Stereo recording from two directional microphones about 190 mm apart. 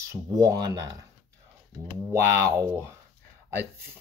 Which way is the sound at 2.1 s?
15° right (ahead or behind).